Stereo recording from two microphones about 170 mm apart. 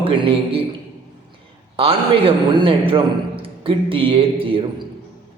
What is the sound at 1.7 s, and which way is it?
A man's voice, 30° right (ahead or behind).